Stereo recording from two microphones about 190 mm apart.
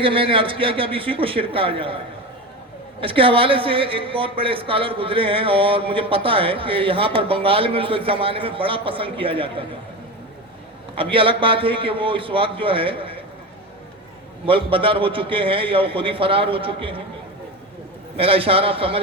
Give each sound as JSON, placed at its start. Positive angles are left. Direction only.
{"t": 0.0, "sound": "a woman's voice", "side_deg": -30}
{"t": 3.0, "sound": "a woman's voice", "side_deg": -30}
{"t": 10.9, "sound": "a woman's voice", "side_deg": -30}
{"t": 14.4, "sound": "a woman's voice", "side_deg": -30}
{"t": 18.2, "sound": "a woman's voice", "side_deg": -30}